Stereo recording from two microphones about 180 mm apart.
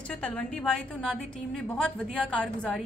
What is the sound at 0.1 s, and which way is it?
A woman's voice, 5° left (ahead or behind).